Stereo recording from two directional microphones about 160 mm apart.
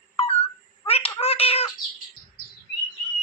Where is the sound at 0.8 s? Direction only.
40° left (ahead or behind).